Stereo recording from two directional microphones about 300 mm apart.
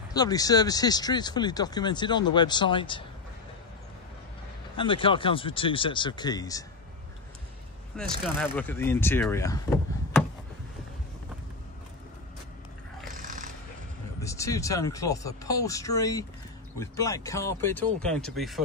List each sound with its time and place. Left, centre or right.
0.1 s speech: centre
4.7 s speech: centre
7.9 s speech: centre
13.0 s a sound: right
14.2 s speech: centre